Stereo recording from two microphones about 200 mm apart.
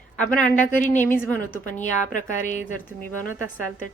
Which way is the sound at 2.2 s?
40° left (ahead or behind).